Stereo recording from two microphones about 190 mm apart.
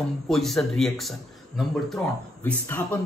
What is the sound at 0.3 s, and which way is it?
Speech, centre (ahead or behind).